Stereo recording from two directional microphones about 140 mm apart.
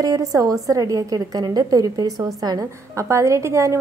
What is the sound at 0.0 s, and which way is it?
A woman's voice, 25° right (ahead or behind).